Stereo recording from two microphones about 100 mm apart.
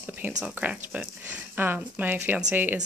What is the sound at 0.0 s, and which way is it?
Speech, 15° right (ahead or behind).